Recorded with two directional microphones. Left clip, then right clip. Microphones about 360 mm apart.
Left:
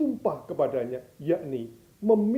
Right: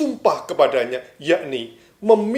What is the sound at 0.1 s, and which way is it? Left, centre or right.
Speech, centre.